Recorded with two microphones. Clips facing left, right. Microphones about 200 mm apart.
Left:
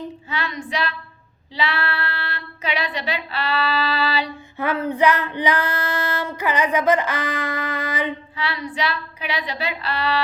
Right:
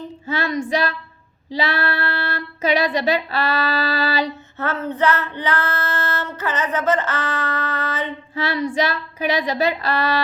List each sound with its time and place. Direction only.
0.3 s child singing: 40° right (ahead or behind)
1.5 s speech: 40° right (ahead or behind)
4.5 s female singing: 10° left (ahead or behind)
8.4 s speech: 45° right (ahead or behind)